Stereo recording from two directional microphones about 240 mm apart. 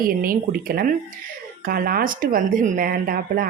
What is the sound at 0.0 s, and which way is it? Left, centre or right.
Speech, right.